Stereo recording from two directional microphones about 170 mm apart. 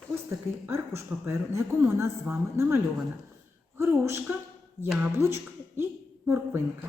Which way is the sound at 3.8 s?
15° right (ahead or behind).